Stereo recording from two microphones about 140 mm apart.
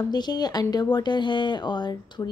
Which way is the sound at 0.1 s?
30° left (ahead or behind).